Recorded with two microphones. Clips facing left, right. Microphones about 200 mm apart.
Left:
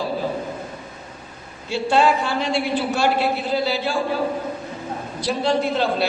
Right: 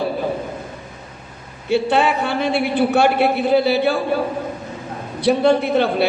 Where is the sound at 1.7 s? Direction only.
60° right (ahead or behind).